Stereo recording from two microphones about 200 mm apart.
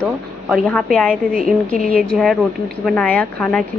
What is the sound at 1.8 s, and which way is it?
Speech, 45° right (ahead or behind).